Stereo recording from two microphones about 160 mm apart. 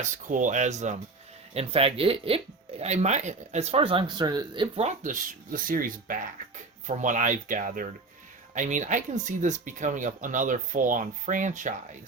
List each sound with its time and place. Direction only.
0.0 s speech: 50° right (ahead or behind)
1.5 s speech: 35° right (ahead or behind)